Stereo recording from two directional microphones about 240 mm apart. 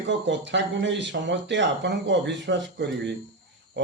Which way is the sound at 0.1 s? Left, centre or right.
Right.